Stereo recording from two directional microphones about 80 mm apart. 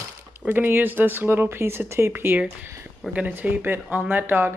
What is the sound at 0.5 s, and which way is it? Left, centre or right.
Speech, right.